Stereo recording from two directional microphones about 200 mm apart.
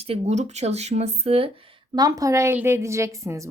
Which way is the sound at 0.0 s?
30° right (ahead or behind).